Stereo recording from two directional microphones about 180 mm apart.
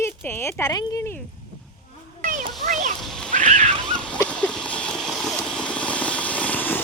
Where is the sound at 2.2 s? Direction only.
45° right (ahead or behind).